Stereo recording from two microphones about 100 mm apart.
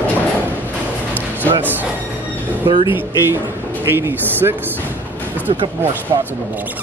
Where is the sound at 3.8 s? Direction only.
20° right (ahead or behind).